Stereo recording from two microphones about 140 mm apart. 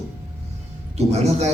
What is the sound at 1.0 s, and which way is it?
Speech, 50° right (ahead or behind).